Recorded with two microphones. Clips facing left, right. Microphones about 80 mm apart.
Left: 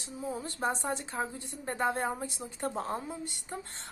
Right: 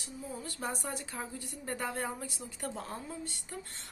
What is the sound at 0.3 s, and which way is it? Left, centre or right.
A woman's voice, left.